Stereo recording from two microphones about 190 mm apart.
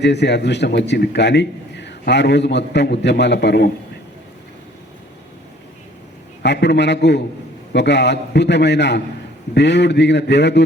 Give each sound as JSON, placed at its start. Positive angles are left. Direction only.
{"t": 0.0, "sound": "a man's voice", "side_deg": 65}
{"t": 6.4, "sound": "a man's voice", "side_deg": 65}